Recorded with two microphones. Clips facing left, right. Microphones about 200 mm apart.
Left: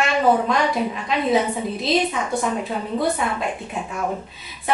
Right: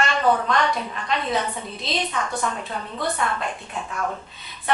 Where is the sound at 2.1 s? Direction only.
15° left (ahead or behind).